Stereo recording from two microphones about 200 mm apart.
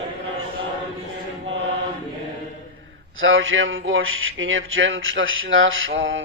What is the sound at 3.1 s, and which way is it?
Speech, 75° right (ahead or behind).